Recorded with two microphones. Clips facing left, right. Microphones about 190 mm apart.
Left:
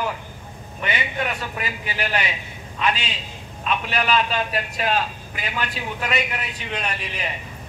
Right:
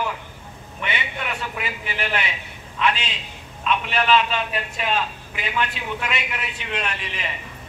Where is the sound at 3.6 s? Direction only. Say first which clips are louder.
Right 1 dB; 40° left (ahead or behind).